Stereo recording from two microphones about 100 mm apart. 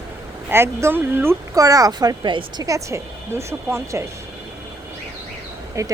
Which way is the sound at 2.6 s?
30° right (ahead or behind).